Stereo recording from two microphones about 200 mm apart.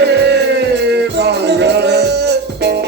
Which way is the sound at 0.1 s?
60° right (ahead or behind).